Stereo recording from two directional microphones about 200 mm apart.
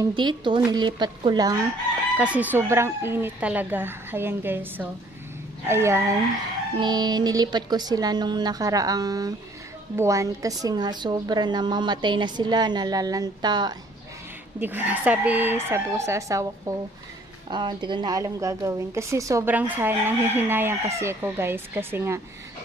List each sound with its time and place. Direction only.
0.0 s a woman's voice: 20° right (ahead or behind)
2.1 s a woman's voice: 5° right (ahead or behind)
14.6 s speech: 10° right (ahead or behind)